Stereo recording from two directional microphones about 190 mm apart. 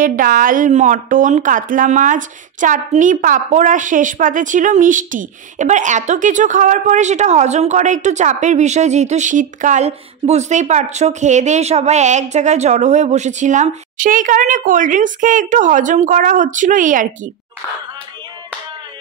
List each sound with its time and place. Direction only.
0.0 s a woman's voice: 45° right (ahead or behind)